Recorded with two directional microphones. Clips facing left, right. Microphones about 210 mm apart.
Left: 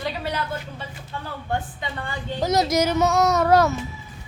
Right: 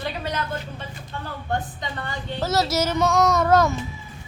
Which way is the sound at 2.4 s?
15° left (ahead or behind).